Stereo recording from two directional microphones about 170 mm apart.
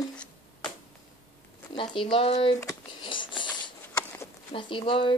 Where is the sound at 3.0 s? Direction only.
30° left (ahead or behind).